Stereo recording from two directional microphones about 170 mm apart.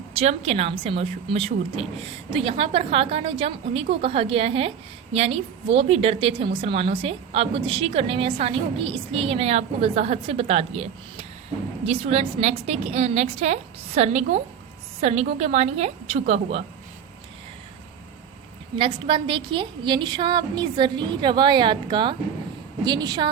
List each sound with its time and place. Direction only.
0.2 s a woman's voice: 40° right (ahead or behind)
18.8 s a woman's voice: 30° right (ahead or behind)